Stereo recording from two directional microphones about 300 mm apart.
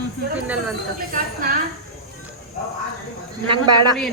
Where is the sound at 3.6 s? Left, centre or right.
Right.